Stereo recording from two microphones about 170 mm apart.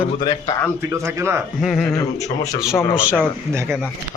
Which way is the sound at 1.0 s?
15° right (ahead or behind).